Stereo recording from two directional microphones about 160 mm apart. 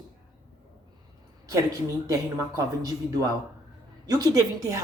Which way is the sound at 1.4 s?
20° right (ahead or behind).